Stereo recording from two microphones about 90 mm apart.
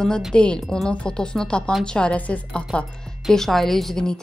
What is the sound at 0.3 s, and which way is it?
A woman's voice, 10° left (ahead or behind).